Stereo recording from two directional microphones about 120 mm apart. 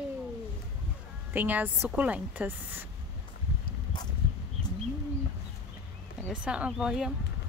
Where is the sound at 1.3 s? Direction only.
15° right (ahead or behind).